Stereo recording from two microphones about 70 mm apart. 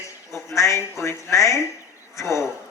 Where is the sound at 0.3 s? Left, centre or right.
Left.